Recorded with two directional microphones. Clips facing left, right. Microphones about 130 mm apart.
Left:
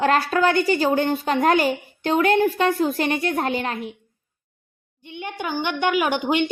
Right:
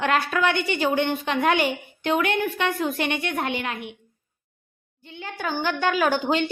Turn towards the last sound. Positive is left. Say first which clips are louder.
# left 1 dB
turn(degrees=15)  # may be behind; listen again after turning